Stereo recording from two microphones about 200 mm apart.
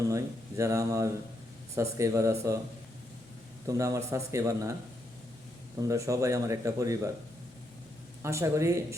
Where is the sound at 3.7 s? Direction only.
15° right (ahead or behind).